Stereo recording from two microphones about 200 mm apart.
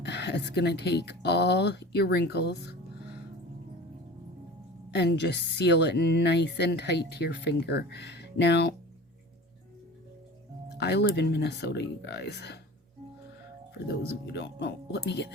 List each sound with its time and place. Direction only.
0.0 s speech: 60° left (ahead or behind)
4.9 s speech: 60° left (ahead or behind)
10.8 s speech: 60° left (ahead or behind)
14.3 s speech: 60° left (ahead or behind)